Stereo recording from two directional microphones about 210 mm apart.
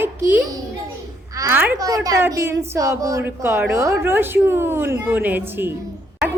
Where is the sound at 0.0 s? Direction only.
10° right (ahead or behind).